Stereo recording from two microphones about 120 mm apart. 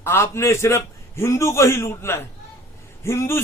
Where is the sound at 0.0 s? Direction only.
20° left (ahead or behind).